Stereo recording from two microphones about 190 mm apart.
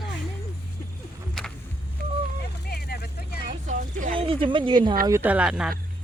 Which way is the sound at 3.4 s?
40° right (ahead or behind).